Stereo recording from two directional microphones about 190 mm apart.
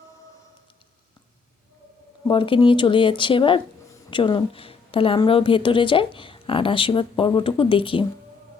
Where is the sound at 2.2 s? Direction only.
25° left (ahead or behind).